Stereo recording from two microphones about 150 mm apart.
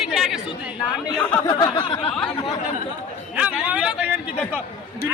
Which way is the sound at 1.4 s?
25° left (ahead or behind).